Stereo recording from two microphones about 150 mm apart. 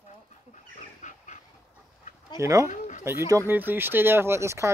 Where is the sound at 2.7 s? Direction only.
55° left (ahead or behind).